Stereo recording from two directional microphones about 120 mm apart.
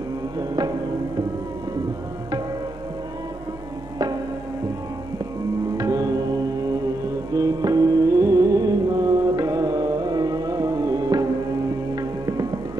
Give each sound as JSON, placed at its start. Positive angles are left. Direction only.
{"t": 0.4, "sound": "music", "side_deg": -35}
{"t": 5.8, "sound": "music", "side_deg": -30}